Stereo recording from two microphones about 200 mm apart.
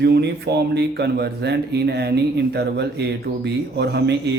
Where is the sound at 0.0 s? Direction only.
55° right (ahead or behind).